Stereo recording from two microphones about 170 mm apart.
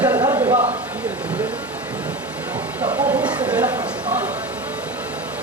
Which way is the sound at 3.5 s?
10° right (ahead or behind).